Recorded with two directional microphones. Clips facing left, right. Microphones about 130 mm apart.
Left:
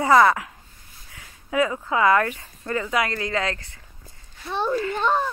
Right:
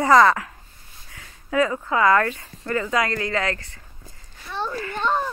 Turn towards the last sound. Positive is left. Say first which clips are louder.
# left 1 dB
turn(degrees=5)  # may be behind; listen again after turning